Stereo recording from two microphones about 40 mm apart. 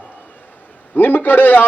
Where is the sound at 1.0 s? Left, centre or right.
Left.